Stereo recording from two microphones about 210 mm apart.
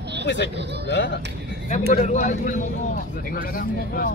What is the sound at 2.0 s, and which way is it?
Speech, 35° left (ahead or behind).